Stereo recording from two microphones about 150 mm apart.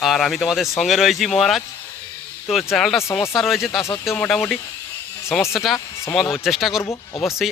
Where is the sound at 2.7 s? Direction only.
Centre (ahead or behind).